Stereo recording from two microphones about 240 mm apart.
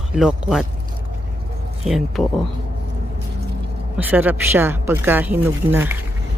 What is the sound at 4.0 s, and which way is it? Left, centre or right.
A woman's voice, centre.